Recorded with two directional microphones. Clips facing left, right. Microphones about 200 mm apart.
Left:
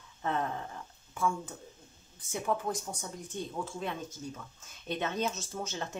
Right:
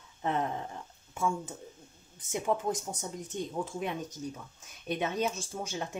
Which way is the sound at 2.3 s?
20° right (ahead or behind).